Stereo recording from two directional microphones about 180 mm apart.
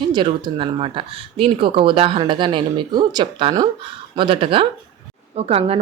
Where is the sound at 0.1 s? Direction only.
25° right (ahead or behind).